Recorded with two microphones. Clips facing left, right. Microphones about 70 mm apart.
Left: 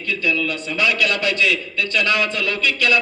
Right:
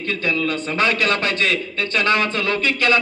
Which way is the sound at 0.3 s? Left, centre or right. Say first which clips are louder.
Right 1 dB; right.